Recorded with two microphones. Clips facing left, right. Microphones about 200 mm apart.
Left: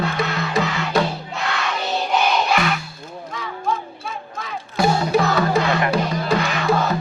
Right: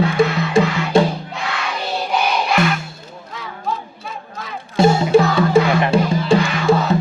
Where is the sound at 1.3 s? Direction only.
5° right (ahead or behind).